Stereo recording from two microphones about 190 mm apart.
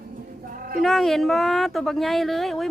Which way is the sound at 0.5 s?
45° right (ahead or behind).